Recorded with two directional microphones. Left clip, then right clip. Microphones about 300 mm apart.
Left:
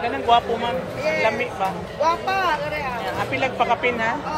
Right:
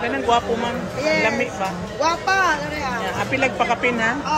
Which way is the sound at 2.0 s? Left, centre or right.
Right.